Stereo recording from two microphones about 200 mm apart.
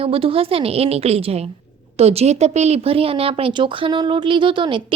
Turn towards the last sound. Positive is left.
turn(degrees=-25)  # may be behind; listen again after turning